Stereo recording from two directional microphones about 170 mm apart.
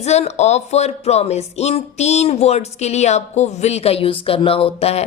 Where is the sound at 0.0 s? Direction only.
40° left (ahead or behind).